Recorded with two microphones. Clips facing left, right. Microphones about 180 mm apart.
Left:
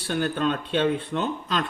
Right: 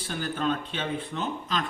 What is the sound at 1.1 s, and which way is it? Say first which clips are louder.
Speech: left 6 dB; 75° left (ahead or behind).